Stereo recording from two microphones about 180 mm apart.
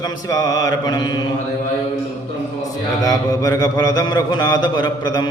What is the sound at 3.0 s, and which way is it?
Mantra, 20° left (ahead or behind).